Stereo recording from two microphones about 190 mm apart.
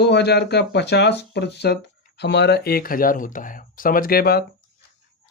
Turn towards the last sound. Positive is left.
turn(degrees=55)  # may be behind; listen again after turning